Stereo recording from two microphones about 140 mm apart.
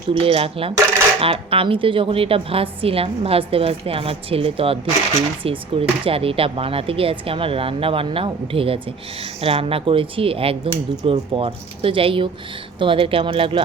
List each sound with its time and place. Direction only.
0.2 s a woman's voice: 40° right (ahead or behind)